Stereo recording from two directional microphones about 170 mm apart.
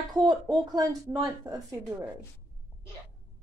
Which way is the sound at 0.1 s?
25° right (ahead or behind).